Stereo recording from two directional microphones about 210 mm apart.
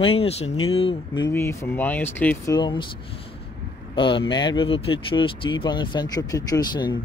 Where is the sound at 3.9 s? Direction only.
25° left (ahead or behind).